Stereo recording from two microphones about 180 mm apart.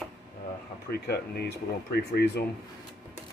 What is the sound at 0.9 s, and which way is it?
Speech, 65° left (ahead or behind).